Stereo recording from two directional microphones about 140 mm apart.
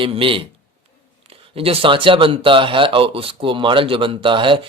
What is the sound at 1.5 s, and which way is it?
Speech, 40° right (ahead or behind).